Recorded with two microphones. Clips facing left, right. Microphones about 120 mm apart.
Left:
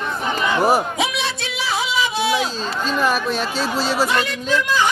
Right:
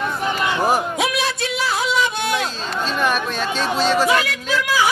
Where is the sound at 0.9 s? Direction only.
Centre (ahead or behind).